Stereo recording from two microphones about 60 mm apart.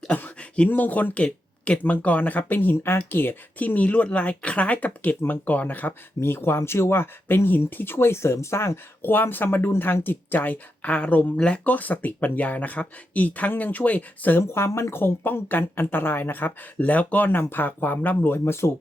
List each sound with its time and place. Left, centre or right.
0.3 s a sound: centre
0.7 s speech: left
14.3 s speech: left